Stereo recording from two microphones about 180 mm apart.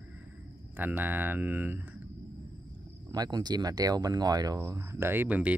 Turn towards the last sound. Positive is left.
turn(degrees=-10)  # may be behind; listen again after turning